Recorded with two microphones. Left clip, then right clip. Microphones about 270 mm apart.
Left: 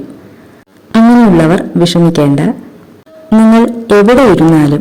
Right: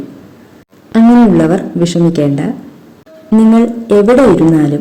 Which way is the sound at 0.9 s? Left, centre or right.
Left.